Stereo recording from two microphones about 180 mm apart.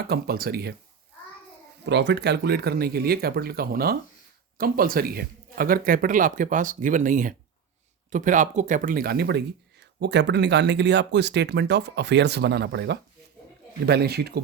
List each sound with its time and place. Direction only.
0.1 s speech: 60° right (ahead or behind)
1.8 s speech: 75° right (ahead or behind)